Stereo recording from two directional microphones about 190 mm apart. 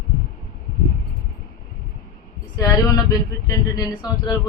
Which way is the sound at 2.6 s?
20° left (ahead or behind).